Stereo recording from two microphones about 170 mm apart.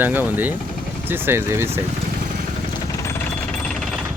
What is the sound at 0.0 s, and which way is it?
Speech, 10° right (ahead or behind).